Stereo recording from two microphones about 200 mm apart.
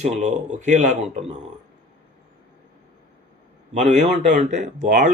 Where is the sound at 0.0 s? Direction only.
35° right (ahead or behind).